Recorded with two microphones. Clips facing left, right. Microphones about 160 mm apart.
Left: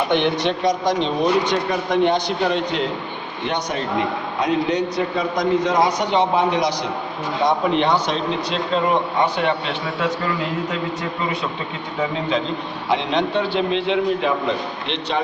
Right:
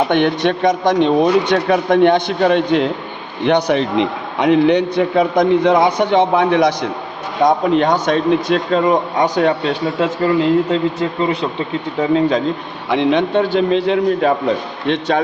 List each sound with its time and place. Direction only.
0.1 s a man's voice: 55° right (ahead or behind)
10.0 s speech: 30° right (ahead or behind)
12.9 s speech: 60° right (ahead or behind)